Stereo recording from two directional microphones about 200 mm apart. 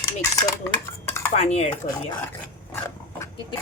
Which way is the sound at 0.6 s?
10° left (ahead or behind).